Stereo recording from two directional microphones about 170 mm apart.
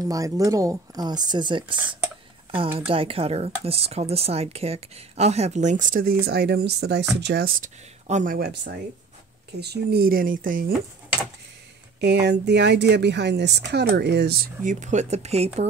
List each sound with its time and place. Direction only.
0.0 s speech: 20° right (ahead or behind)
2.9 s speech: 35° right (ahead or behind); by 8.4 s 50° right (ahead or behind)
8.4 s speech: 80° right; by 10.7 s 55° right (ahead or behind)
12.0 s speech: 85° right
14.6 s speech: 50° right (ahead or behind)